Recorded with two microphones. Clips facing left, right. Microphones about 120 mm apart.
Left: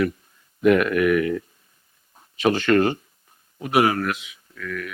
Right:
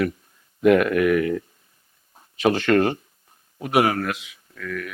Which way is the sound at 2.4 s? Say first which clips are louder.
Even; 30° right (ahead or behind).